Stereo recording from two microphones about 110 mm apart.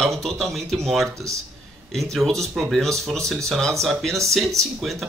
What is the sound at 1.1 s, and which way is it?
Speech, 30° right (ahead or behind).